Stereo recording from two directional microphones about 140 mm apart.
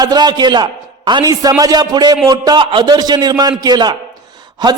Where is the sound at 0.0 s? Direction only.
30° right (ahead or behind).